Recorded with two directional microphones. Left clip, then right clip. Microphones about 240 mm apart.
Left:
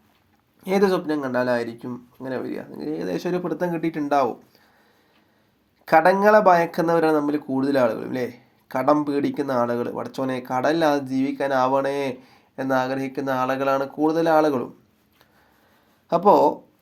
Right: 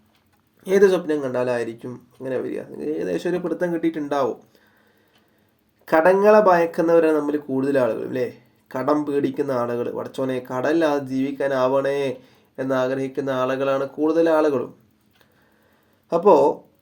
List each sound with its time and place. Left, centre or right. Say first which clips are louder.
0.6 s speech: right 4 dB; centre
5.8 s speech: even; left
16.0 s speech: right 1 dB; centre